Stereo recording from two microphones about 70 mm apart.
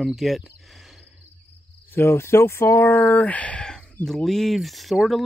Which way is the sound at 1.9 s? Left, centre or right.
Left.